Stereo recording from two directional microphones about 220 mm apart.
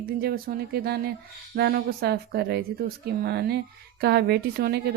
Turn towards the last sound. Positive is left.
turn(degrees=-50)  # may be behind; listen again after turning